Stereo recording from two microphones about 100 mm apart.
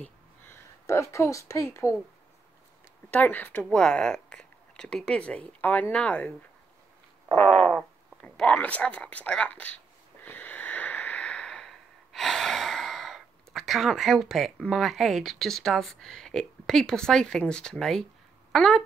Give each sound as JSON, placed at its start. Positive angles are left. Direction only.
{"t": 0.0, "sound": "a woman's voice", "side_deg": 20}
{"t": 3.1, "sound": "speech", "side_deg": 15}
{"t": 3.6, "sound": "speech", "side_deg": 5}
{"t": 7.3, "sound": "speech", "side_deg": 10}
{"t": 10.2, "sound": "a sound", "side_deg": 20}
{"t": 14.7, "sound": "speech", "side_deg": 0}